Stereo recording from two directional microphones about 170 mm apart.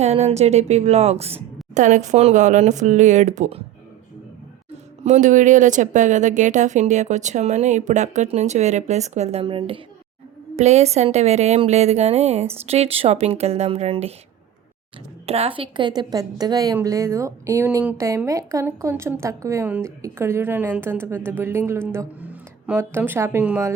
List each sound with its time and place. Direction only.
0.0 s speech: 40° right (ahead or behind)
5.0 s speech: 45° right (ahead or behind)
15.3 s a woman's voice: 35° right (ahead or behind); by 23.7 s 15° right (ahead or behind)